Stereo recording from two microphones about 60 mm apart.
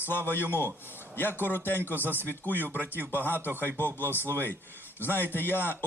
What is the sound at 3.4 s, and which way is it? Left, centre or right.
Speech, right.